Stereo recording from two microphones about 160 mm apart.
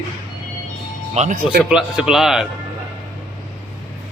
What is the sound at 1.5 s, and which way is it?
Speech, 5° right (ahead or behind).